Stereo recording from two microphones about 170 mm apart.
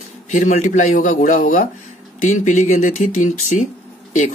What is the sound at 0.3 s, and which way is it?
Speech, 45° left (ahead or behind).